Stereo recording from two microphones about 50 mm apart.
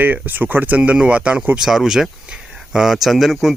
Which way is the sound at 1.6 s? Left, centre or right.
Centre.